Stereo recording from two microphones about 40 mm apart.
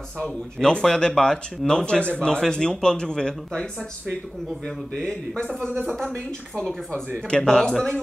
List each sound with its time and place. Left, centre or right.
0.2 s speech: centre
4.9 s speech: left
5.7 s speech: right
7.2 s speech: left